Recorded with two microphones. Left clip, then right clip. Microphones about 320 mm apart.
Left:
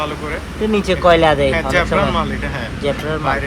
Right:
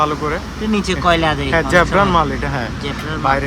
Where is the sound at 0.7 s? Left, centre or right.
Centre.